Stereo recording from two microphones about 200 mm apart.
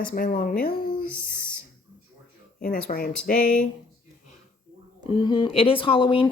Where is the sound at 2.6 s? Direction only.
45° left (ahead or behind).